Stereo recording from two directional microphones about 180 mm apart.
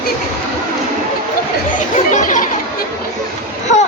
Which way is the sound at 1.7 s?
45° left (ahead or behind).